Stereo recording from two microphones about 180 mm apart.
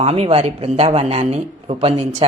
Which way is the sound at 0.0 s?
35° right (ahead or behind).